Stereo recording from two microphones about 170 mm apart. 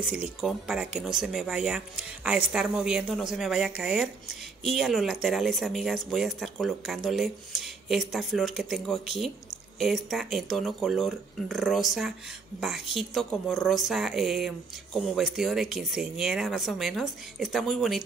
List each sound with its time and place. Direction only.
0.0 s speech: 5° right (ahead or behind)